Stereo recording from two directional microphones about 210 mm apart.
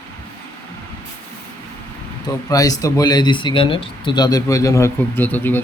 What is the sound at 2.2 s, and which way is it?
Speech, 15° left (ahead or behind).